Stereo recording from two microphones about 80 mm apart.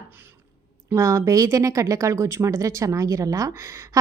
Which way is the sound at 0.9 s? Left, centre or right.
Right.